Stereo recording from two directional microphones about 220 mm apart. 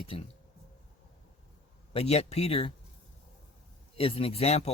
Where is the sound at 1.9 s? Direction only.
30° left (ahead or behind).